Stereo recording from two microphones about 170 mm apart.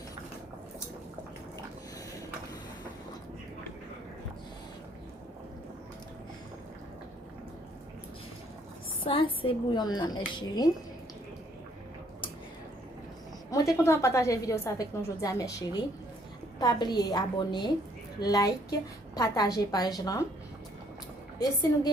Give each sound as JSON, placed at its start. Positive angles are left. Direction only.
{"t": 9.0, "sound": "a woman's voice", "side_deg": 30}
{"t": 13.5, "sound": "a woman's voice", "side_deg": 20}